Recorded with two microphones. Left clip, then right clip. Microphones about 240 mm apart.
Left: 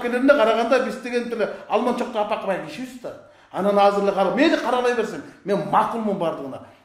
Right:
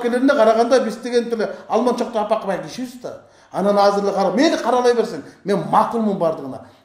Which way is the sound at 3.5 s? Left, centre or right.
Right.